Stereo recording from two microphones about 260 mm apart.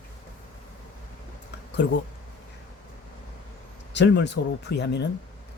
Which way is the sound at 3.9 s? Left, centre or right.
Left.